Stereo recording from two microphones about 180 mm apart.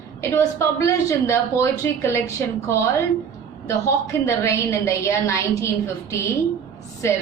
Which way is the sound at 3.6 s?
15° left (ahead or behind).